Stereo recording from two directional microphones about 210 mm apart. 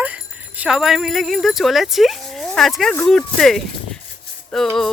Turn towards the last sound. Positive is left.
turn(degrees=0)  # may be behind; listen again after turning